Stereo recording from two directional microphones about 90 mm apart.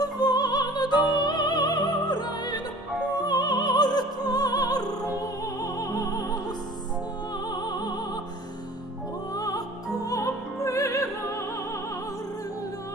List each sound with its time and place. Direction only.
0.0 s music: 45° left (ahead or behind)
7.4 s music: 50° left (ahead or behind)
9.3 s music: 45° left (ahead or behind)